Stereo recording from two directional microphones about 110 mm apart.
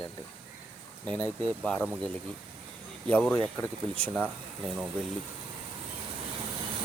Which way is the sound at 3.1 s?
10° left (ahead or behind).